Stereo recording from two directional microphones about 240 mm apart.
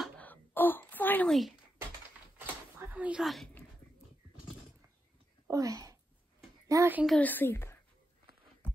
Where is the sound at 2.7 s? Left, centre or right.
Centre.